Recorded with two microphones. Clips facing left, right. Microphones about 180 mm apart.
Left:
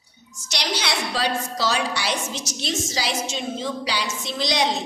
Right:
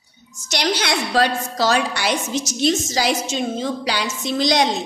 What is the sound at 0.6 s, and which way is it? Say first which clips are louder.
A woman's voice: right 5 dB; 50° right (ahead or behind).